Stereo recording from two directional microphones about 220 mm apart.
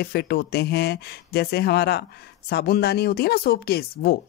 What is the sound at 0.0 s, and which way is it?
A woman's voice, 45° left (ahead or behind).